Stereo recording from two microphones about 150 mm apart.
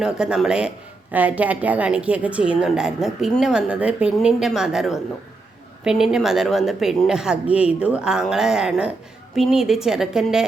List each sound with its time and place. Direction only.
0.0 s a woman's voice: 5° right (ahead or behind)